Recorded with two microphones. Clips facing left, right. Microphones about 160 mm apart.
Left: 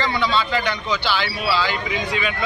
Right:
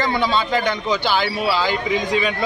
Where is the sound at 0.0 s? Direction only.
45° right (ahead or behind).